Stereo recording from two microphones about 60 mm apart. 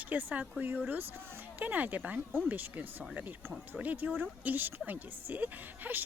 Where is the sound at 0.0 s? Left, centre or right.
Right.